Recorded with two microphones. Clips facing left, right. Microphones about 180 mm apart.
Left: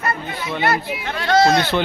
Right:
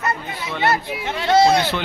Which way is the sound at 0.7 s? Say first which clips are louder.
Right 1 dB; 20° right (ahead or behind).